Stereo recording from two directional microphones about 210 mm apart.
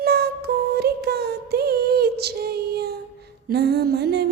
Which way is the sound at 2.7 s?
50° right (ahead or behind).